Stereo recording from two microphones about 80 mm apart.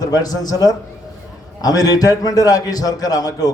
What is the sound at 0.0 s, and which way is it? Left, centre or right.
A man's voice, left.